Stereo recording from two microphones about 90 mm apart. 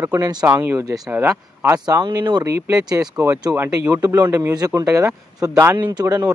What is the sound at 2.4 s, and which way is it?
Speech, 30° right (ahead or behind).